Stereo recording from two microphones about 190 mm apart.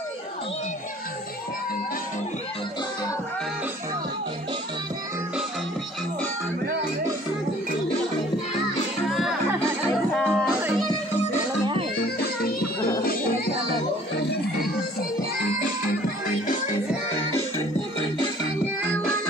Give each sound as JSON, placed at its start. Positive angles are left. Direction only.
{"t": 9.1, "sound": "music", "side_deg": 0}
{"t": 12.0, "sound": "music", "side_deg": 55}